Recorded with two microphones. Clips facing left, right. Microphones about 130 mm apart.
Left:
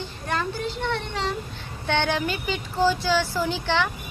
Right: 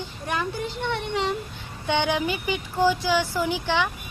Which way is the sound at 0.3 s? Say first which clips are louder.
Left 1 dB; 15° right (ahead or behind).